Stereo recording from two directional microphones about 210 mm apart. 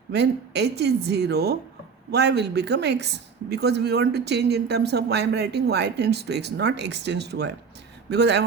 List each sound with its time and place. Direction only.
0.1 s speech: 55° right (ahead or behind)